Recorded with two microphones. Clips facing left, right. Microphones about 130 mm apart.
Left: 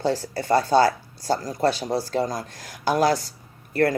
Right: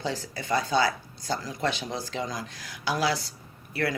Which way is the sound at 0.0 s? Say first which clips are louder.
Left 8 dB; 45° left (ahead or behind).